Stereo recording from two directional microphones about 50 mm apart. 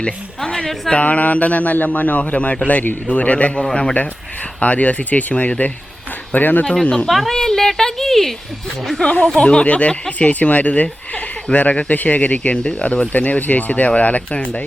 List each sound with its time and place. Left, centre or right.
0.5 s a woman's voice: centre
0.9 s speech: left
7.1 s speech: centre
9.0 s speech: left